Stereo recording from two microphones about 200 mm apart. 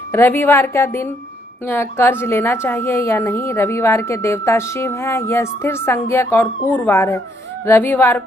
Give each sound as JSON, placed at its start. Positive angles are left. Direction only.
{"t": 0.1, "sound": "a woman's voice", "side_deg": 10}